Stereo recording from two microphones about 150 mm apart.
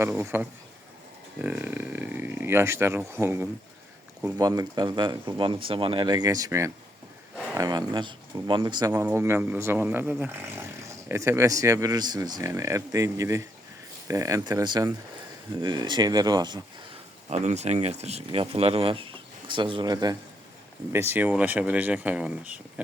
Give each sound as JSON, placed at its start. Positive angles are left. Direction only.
{"t": 0.0, "sound": "speech", "side_deg": -15}
{"t": 4.4, "sound": "speech", "side_deg": -25}
{"t": 8.9, "sound": "speech", "side_deg": -15}
{"t": 17.2, "sound": "speech", "side_deg": -50}
{"t": 20.9, "sound": "speech", "side_deg": -15}